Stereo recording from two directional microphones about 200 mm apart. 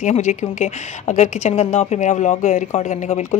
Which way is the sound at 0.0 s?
35° left (ahead or behind).